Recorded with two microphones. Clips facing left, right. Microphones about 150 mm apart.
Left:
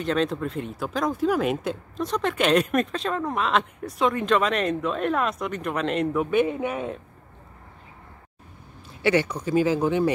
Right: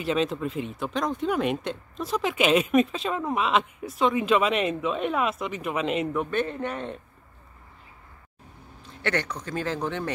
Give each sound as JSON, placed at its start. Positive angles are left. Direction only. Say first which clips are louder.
{"t": 0.0, "sound": "speech", "louder": "left 1 dB", "side_deg": -5}
{"t": 6.3, "sound": "speech", "louder": "left 5 dB", "side_deg": 10}
{"t": 9.0, "sound": "speech", "louder": "left 7 dB", "side_deg": 10}